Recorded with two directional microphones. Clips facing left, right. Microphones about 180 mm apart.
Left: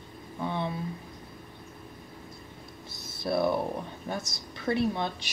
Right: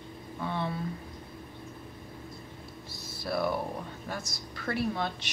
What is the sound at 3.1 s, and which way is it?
Speech, 25° left (ahead or behind).